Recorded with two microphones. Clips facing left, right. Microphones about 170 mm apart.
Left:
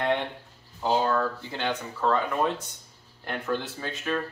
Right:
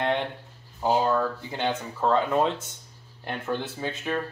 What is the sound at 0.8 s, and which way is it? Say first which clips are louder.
Speech: right 1 dB; 10° right (ahead or behind).